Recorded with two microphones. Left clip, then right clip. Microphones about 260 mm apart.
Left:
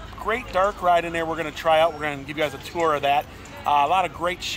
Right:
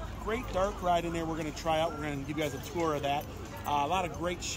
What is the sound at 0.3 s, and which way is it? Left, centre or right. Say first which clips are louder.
Speech: left 10 dB; left.